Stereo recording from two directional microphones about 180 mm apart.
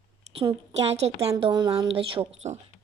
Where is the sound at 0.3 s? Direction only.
35° right (ahead or behind).